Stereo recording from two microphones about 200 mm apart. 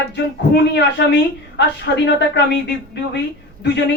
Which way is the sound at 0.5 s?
60° left (ahead or behind).